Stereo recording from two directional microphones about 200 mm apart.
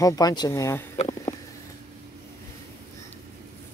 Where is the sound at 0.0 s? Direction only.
20° left (ahead or behind).